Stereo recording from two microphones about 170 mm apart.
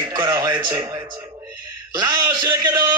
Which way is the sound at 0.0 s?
20° right (ahead or behind).